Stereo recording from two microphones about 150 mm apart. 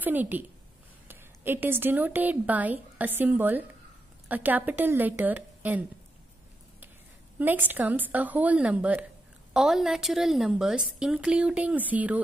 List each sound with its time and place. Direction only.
0.0 s a woman's voice: 10° right (ahead or behind)
7.3 s a woman's voice: 10° right (ahead or behind)